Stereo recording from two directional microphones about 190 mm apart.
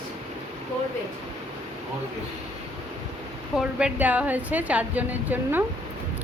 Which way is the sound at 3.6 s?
5° right (ahead or behind).